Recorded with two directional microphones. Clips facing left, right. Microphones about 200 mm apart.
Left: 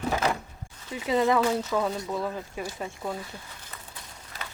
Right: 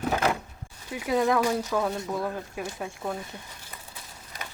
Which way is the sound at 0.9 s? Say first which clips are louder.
Even; 5° right (ahead or behind).